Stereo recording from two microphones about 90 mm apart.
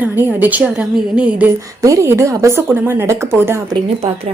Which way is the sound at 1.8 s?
35° right (ahead or behind).